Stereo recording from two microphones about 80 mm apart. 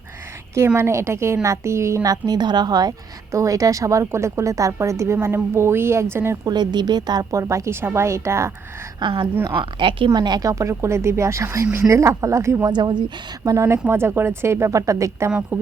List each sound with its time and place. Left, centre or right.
0.8 s speech: right
2.0 s a woman's voice: right
3.3 s speech: right
6.4 s a woman's voice: right
7.3 s speech: right
9.0 s a woman's voice: right
9.6 s a woman's voice: right
10.2 s speech: right
12.6 s speech: right
13.4 s speech: right
13.8 s speech: right